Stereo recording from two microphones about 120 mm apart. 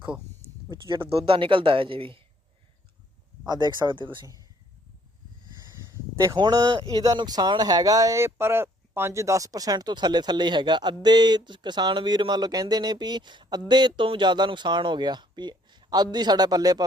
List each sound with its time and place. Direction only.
0.7 s speech: 40° right (ahead or behind)
3.4 s speech: 35° right (ahead or behind)
6.3 s speech: 35° right (ahead or behind)